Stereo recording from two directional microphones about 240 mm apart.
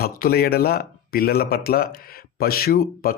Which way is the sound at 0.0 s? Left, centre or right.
Left.